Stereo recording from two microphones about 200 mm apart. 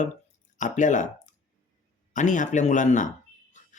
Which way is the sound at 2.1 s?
40° left (ahead or behind).